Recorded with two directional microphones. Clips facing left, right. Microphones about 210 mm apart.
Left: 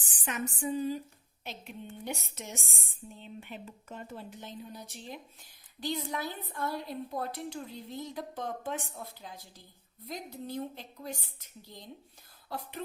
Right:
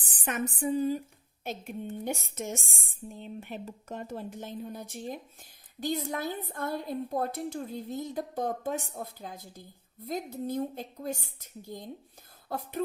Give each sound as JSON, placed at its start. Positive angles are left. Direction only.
{"t": 0.0, "sound": "a woman's voice", "side_deg": -50}